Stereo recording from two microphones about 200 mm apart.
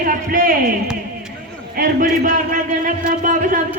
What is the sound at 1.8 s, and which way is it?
A man's voice, 50° right (ahead or behind).